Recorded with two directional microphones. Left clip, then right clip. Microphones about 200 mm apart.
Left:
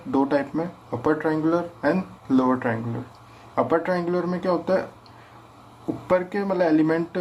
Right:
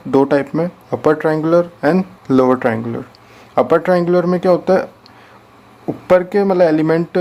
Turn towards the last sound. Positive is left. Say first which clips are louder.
# right 8 dB
turn(degrees=-45)  # may be behind; listen again after turning